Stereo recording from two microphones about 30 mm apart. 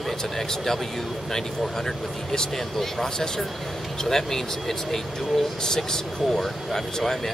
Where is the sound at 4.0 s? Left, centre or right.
Centre.